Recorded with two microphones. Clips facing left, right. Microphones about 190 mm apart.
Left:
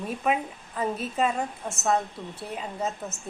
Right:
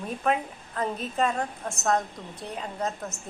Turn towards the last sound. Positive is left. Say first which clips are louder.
# even
turn(degrees=5)  # may be behind; listen again after turning